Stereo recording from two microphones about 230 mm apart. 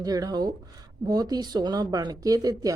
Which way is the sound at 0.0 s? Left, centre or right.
Centre.